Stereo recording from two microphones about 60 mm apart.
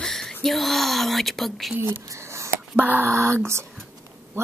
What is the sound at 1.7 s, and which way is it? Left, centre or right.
Speech, right.